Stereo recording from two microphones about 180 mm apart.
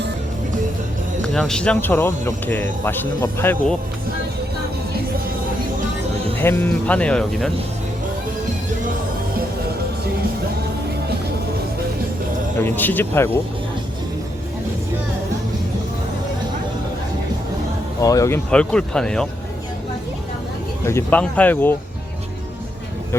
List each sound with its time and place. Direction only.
1.3 s speech: centre (ahead or behind)
6.4 s speech: 10° left (ahead or behind)
12.6 s speech: 10° left (ahead or behind)
18.0 s speech: 20° left (ahead or behind)
18.5 s speech: 5° left (ahead or behind)
20.8 s speech: 10° left (ahead or behind)